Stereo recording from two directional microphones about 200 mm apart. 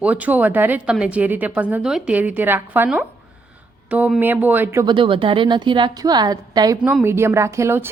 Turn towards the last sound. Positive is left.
turn(degrees=-15)  # may be behind; listen again after turning